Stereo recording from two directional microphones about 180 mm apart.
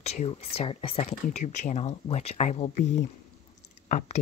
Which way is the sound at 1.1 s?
45° left (ahead or behind).